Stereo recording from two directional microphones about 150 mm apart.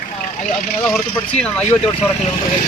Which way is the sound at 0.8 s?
5° left (ahead or behind).